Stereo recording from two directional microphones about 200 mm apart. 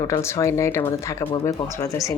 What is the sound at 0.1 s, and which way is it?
Speech, 15° left (ahead or behind).